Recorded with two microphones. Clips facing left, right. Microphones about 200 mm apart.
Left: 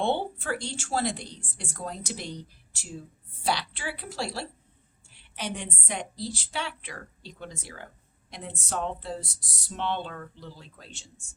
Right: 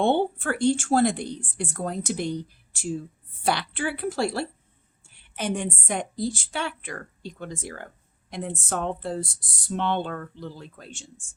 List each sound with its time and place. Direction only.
0.0 s speech: 55° right (ahead or behind)